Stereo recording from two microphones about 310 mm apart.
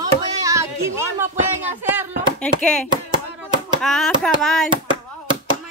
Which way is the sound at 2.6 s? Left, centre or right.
Centre.